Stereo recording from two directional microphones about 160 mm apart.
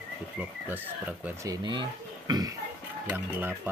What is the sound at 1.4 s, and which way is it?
Speech, 30° right (ahead or behind).